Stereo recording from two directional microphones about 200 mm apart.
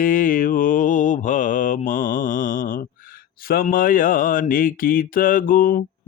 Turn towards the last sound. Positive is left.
turn(degrees=45)  # may be behind; listen again after turning